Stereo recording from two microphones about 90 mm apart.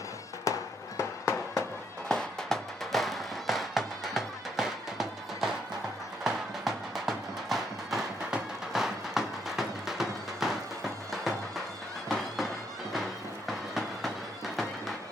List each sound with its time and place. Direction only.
0.5 s music: 40° left (ahead or behind)
0.9 s fireworks: 35° left (ahead or behind)
2.0 s music: 5° left (ahead or behind)
7.5 s clip-clop: 5° right (ahead or behind)
14.5 s music: centre (ahead or behind)